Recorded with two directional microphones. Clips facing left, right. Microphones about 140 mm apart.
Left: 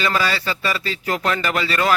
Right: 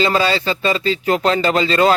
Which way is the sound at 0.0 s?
25° right (ahead or behind).